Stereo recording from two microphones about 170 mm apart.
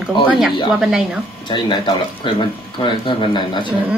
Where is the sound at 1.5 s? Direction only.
25° left (ahead or behind).